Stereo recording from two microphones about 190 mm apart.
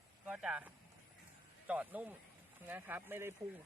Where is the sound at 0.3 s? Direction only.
5° right (ahead or behind).